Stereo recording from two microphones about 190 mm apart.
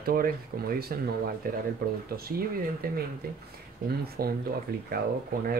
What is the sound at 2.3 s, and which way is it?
Speech, 50° right (ahead or behind).